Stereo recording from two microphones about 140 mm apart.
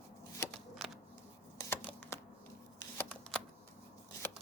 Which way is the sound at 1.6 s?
15° left (ahead or behind).